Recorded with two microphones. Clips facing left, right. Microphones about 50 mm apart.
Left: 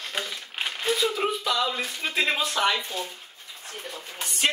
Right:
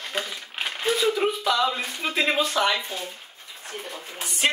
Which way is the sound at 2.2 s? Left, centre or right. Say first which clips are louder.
Right 2 dB; centre.